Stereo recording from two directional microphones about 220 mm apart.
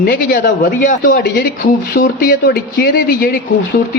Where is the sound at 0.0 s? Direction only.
40° left (ahead or behind).